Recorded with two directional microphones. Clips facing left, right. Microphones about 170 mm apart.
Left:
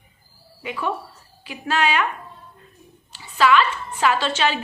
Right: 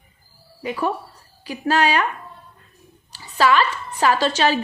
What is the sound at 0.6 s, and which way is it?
Speech, 40° right (ahead or behind).